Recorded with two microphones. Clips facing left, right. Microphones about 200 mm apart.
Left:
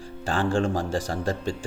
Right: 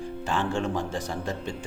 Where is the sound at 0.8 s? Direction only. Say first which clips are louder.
Left 4 dB; 90° left.